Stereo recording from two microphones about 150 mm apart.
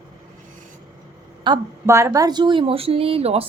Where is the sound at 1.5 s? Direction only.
30° right (ahead or behind).